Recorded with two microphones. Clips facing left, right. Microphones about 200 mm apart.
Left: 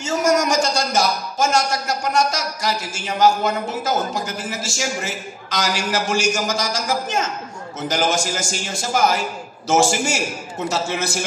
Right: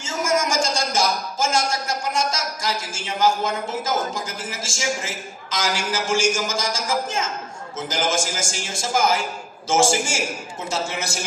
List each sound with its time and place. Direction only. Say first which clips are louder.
0.0 s a man's voice: left 5 dB; 65° left (ahead or behind)